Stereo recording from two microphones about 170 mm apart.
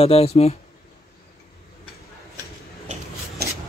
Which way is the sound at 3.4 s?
65° right (ahead or behind).